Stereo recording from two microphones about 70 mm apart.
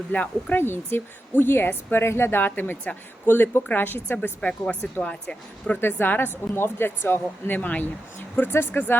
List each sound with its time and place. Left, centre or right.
0.1 s speech: left
0.6 s a woman's voice: left
4.4 s speech: centre
5.8 s a woman's voice: left